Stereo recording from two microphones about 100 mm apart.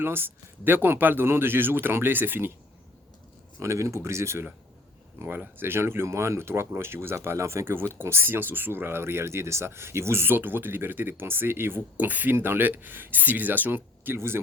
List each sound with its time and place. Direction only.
0.0 s speech: 20° right (ahead or behind)
3.6 s speech: 30° right (ahead or behind)